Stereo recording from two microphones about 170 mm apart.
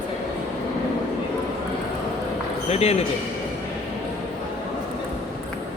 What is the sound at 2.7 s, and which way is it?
Speech, 40° left (ahead or behind).